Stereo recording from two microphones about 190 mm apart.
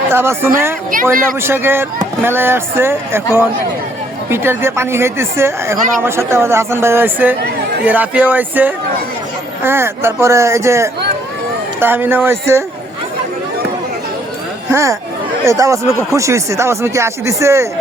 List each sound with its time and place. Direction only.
0.1 s speech: 10° right (ahead or behind)
4.3 s speech: 10° right (ahead or behind)
14.7 s speech: 15° right (ahead or behind)